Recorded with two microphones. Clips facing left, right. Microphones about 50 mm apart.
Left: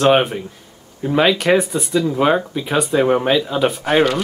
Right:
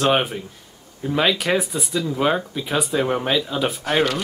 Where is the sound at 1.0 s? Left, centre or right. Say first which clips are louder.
Left 5 dB; centre.